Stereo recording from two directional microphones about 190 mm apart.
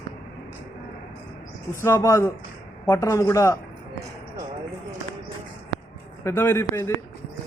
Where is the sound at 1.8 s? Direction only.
15° left (ahead or behind).